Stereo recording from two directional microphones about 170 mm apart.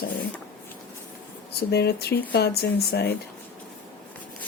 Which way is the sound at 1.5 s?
70° left (ahead or behind).